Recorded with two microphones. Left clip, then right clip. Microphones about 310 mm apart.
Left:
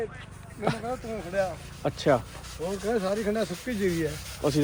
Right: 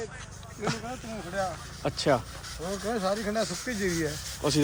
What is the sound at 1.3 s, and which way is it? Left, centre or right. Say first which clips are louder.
Speech: left 3 dB; centre.